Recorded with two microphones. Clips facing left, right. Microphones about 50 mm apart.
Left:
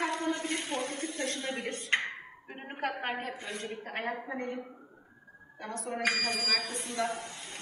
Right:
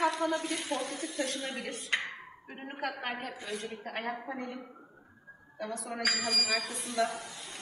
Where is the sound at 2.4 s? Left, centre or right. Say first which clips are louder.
Right 1 dB; left.